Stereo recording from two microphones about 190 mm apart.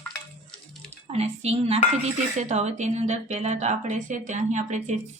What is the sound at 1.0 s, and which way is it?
A woman's voice, 35° right (ahead or behind).